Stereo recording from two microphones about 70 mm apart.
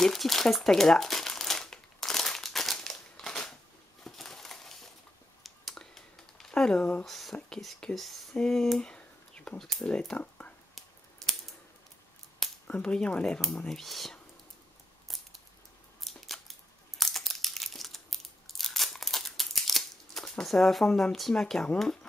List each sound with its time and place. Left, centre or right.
0.0 s crumpling: centre
4.0 s a sound: centre
5.4 s computer keyboard: centre
7.1 s speech: centre
9.6 s speech: centre
9.8 s speech: centre
11.2 s scissors: centre
12.6 s speech: centre
16.0 s a sound: centre